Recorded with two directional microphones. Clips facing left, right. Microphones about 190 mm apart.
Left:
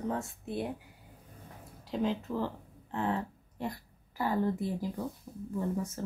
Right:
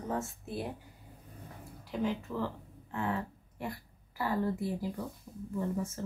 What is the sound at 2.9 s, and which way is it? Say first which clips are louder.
A woman's voice: left 2 dB; 25° left (ahead or behind).